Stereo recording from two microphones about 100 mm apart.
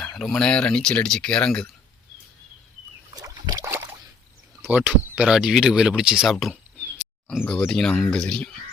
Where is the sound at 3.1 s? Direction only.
40° right (ahead or behind).